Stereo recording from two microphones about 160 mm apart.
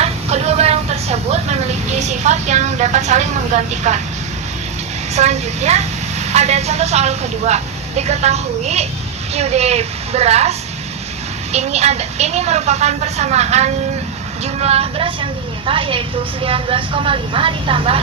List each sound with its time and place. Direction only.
0.0 s vehicle: 40° right (ahead or behind)
5.1 s a woman's voice: 45° right (ahead or behind)
11.5 s a woman's voice: 45° right (ahead or behind)